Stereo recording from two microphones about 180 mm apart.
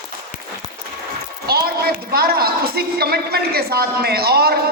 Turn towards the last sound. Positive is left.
turn(degrees=-60)  # may be behind; listen again after turning